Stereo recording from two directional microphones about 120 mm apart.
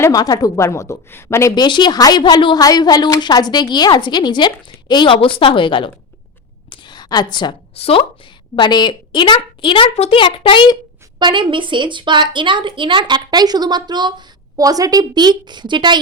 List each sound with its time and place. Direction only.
0.0 s a woman's voice: 30° left (ahead or behind)
1.5 s a woman's voice: 40° left (ahead or behind)
6.7 s a sound: 40° left (ahead or behind)
7.8 s a woman's voice: 55° left (ahead or behind)
8.5 s a woman's voice: 40° left (ahead or behind)
11.2 s a woman's voice: 40° right (ahead or behind)